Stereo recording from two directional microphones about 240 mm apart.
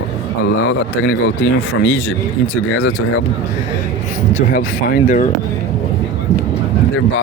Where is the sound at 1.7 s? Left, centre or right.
Left.